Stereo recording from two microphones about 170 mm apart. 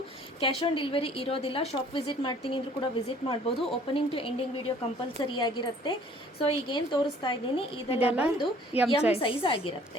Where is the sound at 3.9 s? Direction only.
30° left (ahead or behind).